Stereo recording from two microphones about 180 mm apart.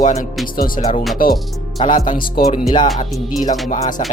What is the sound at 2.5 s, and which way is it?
Music, 25° left (ahead or behind).